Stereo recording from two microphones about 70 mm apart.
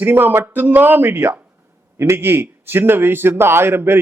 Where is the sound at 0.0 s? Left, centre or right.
Right.